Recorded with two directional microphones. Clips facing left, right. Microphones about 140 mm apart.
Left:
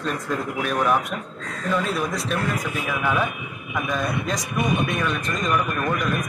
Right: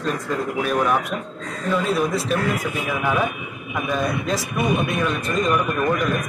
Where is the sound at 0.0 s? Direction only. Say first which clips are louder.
Right 2 dB; centre (ahead or behind).